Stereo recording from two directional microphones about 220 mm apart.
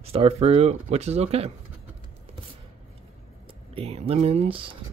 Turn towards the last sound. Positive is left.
turn(degrees=-25)  # may be behind; listen again after turning